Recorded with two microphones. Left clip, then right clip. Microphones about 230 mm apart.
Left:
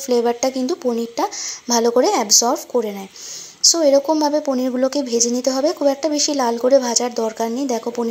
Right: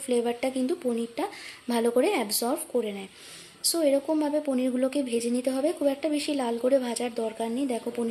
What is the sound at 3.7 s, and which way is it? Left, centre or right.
Speech, centre.